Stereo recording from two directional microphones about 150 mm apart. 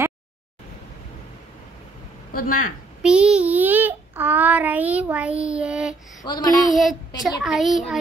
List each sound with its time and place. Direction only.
2.3 s speech: 70° left (ahead or behind)
3.0 s a child's voice: 5° right (ahead or behind)
5.4 s child singing: 5° right (ahead or behind)
6.2 s a sound: 25° left (ahead or behind)
6.7 s a child's voice: centre (ahead or behind)